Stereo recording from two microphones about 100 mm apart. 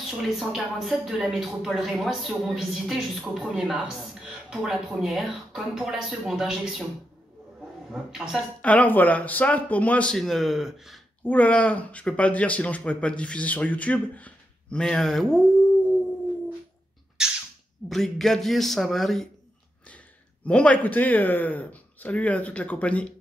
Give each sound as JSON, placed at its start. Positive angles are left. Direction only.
{"t": 0.0, "sound": "speech", "side_deg": 0}
{"t": 7.9, "sound": "speech", "side_deg": -5}
{"t": 8.4, "sound": "speech", "side_deg": 15}
{"t": 10.1, "sound": "speech", "side_deg": 5}
{"t": 11.2, "sound": "speech", "side_deg": 15}
{"t": 17.2, "sound": "a sound", "side_deg": -10}
{"t": 17.8, "sound": "speech", "side_deg": 5}
{"t": 20.4, "sound": "speech", "side_deg": 10}